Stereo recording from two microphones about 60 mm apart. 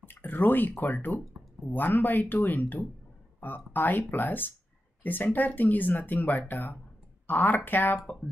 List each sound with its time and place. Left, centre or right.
0.0 s speech: left